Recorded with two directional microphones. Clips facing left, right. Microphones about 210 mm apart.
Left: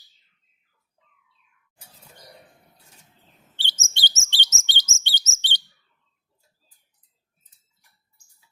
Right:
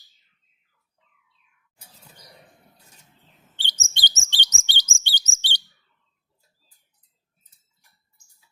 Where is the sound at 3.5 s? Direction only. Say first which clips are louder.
Even; 15° right (ahead or behind).